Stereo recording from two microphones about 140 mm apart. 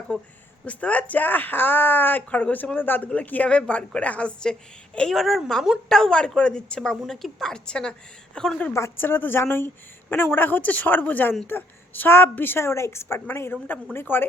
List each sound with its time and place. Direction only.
0.1 s a woman's voice: 10° left (ahead or behind)